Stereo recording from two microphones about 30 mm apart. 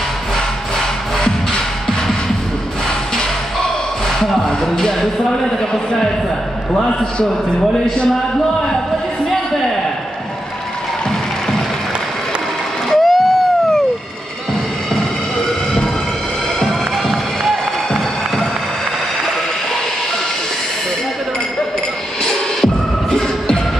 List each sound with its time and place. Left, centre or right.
0.7 s music: centre
4.6 s speech: centre
6.9 s a man's voice: left
12.9 s a sound: centre
16.6 s music: centre
22.2 s music: centre